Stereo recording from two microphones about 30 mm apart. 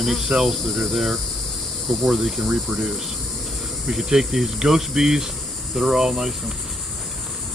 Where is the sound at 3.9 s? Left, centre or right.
Centre.